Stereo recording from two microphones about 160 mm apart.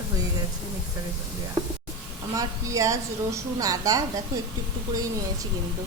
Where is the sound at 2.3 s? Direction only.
20° right (ahead or behind).